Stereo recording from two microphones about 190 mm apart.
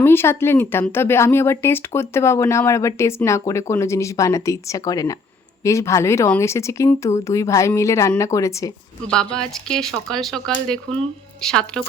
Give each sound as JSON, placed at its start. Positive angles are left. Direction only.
{"t": 0.0, "sound": "speech", "side_deg": 10}
{"t": 9.0, "sound": "speech", "side_deg": 5}